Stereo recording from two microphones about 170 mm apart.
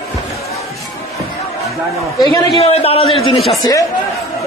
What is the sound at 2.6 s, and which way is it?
Speech, 35° left (ahead or behind).